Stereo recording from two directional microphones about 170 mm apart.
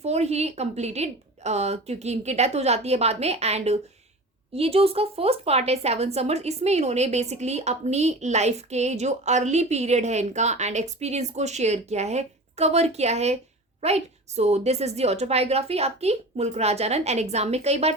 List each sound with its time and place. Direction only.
0.0 s speech: 40° right (ahead or behind)